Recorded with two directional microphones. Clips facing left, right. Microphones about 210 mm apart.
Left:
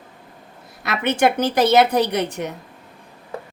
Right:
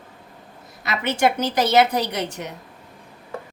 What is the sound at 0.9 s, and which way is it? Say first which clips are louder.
A woman's voice: left 2 dB; 55° left (ahead or behind).